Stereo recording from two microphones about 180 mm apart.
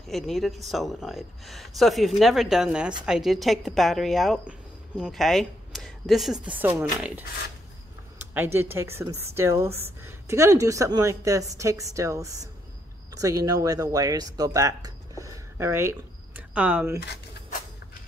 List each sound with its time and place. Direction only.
0.1 s speech: centre (ahead or behind)
8.5 s a woman's voice: 15° right (ahead or behind)